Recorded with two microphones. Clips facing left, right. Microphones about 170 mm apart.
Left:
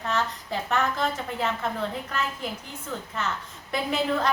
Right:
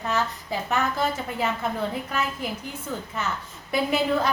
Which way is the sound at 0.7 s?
5° right (ahead or behind).